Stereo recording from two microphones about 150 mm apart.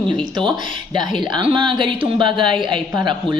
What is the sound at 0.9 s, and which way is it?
Speech, 30° right (ahead or behind).